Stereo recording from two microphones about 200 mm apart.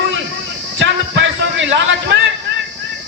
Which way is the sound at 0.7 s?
60° right (ahead or behind).